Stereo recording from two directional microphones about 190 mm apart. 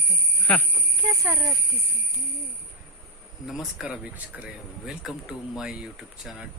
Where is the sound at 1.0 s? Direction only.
15° right (ahead or behind).